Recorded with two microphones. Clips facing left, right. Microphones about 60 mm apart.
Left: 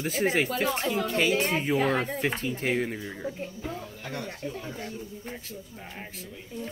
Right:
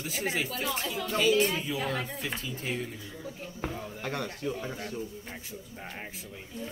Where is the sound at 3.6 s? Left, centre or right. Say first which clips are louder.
Right 1 dB; right.